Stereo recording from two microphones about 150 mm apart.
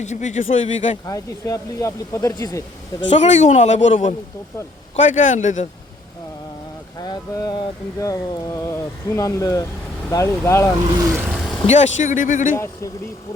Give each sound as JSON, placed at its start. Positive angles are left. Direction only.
{"t": 0.0, "sound": "speech", "side_deg": 50}
{"t": 1.0, "sound": "speech", "side_deg": 20}
{"t": 3.1, "sound": "speech", "side_deg": 50}
{"t": 7.0, "sound": "speech", "side_deg": 25}
{"t": 11.0, "sound": "a sound", "side_deg": -20}
{"t": 11.3, "sound": "vehicle", "side_deg": 0}
{"t": 11.6, "sound": "speech", "side_deg": 50}
{"t": 12.5, "sound": "speech", "side_deg": 20}